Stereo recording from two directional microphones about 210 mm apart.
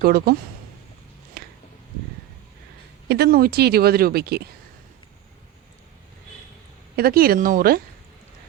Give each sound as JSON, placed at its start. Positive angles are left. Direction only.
{"t": 0.0, "sound": "a woman's voice", "side_deg": -45}
{"t": 3.1, "sound": "a woman's voice", "side_deg": -50}
{"t": 6.9, "sound": "a woman's voice", "side_deg": -45}